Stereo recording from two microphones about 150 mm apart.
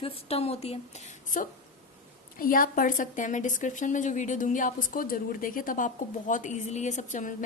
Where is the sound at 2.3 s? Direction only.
70° left (ahead or behind).